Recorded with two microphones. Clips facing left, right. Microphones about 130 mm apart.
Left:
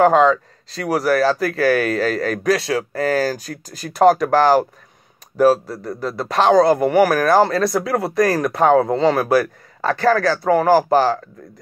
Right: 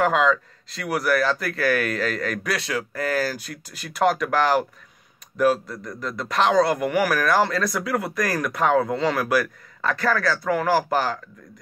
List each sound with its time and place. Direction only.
0.0 s a man's voice: 35° left (ahead or behind)